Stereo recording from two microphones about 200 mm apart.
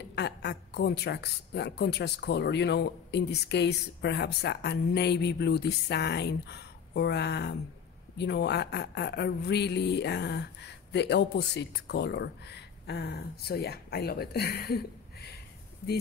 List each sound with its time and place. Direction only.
0.1 s a woman's voice: 60° left (ahead or behind)